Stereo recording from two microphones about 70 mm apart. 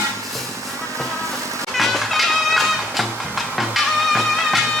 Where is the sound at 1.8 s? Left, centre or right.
Centre.